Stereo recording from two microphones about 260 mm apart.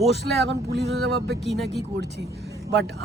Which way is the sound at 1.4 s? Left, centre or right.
Centre.